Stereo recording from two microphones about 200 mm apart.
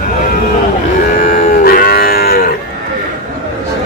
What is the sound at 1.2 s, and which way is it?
Livestock, 40° left (ahead or behind).